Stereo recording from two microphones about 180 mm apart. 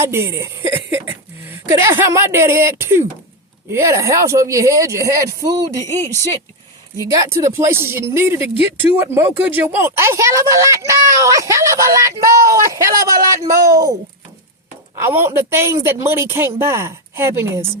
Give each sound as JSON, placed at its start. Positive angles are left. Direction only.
{"t": 0.0, "sound": "speech", "side_deg": -15}
{"t": 6.9, "sound": "speech", "side_deg": -15}
{"t": 15.0, "sound": "speech", "side_deg": -15}